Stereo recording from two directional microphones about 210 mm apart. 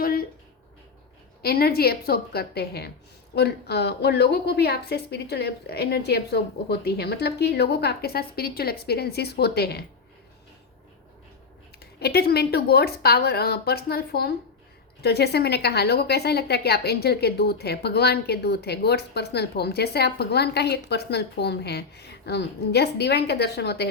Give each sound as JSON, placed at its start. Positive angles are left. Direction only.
{"t": 0.0, "sound": "a sound", "side_deg": 45}
{"t": 1.4, "sound": "a woman's voice", "side_deg": 45}
{"t": 11.8, "sound": "a woman's voice", "side_deg": 50}